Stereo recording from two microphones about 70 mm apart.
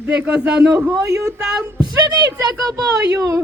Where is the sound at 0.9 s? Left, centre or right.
Right.